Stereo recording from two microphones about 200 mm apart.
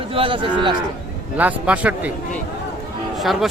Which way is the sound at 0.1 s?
25° right (ahead or behind).